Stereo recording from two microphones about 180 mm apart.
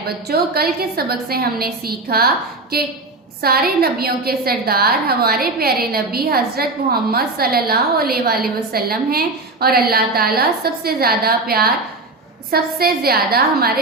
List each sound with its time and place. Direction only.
0.0 s a woman's voice: 60° right (ahead or behind)